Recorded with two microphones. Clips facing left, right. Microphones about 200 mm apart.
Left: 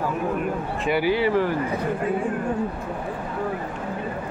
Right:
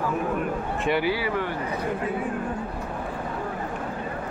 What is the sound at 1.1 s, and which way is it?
Speech, 25° left (ahead or behind).